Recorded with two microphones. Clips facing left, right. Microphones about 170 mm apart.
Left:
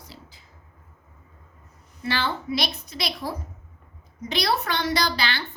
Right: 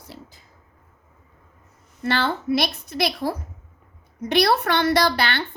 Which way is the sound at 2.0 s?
60° right (ahead or behind).